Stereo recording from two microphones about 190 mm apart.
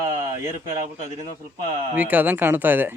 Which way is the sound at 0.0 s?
20° right (ahead or behind).